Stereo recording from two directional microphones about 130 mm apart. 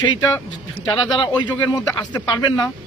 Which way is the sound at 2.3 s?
30° left (ahead or behind).